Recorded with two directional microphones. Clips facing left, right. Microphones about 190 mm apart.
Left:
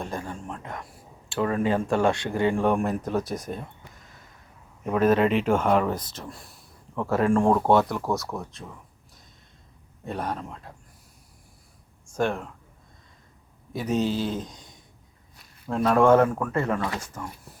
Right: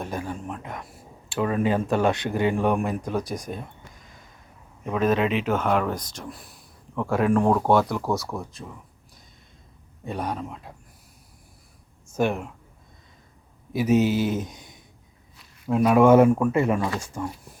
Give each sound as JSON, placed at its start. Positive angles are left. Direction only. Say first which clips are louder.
{"t": 0.0, "sound": "speech", "louder": "right 2 dB", "side_deg": -5}
{"t": 2.6, "sound": "speech", "louder": "even", "side_deg": -5}
{"t": 3.3, "sound": "speech", "louder": "even", "side_deg": -15}
{"t": 4.9, "sound": "a man's voice", "louder": "left 2 dB", "side_deg": 10}
{"t": 5.1, "sound": "speech", "louder": "left 2 dB", "side_deg": -5}
{"t": 10.1, "sound": "speech", "louder": "right 1 dB", "side_deg": 0}
{"t": 12.0, "sound": "speech", "louder": "right 2 dB", "side_deg": -5}
{"t": 13.7, "sound": "speech", "louder": "right 5 dB", "side_deg": -5}
{"t": 15.6, "sound": "speech", "louder": "right 3 dB", "side_deg": -10}